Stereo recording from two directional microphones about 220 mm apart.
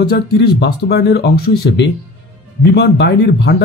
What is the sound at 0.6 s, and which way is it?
A man's voice, 45° left (ahead or behind).